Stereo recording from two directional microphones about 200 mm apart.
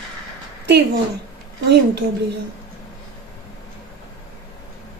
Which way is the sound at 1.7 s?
55° right (ahead or behind).